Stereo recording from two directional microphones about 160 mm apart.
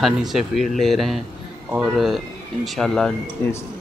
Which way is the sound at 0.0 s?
Centre (ahead or behind).